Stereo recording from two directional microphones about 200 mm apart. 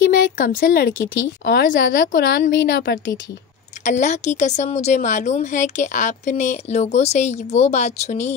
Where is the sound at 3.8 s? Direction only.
35° left (ahead or behind).